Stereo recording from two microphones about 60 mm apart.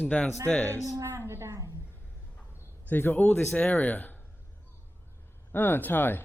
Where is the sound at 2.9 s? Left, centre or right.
Left.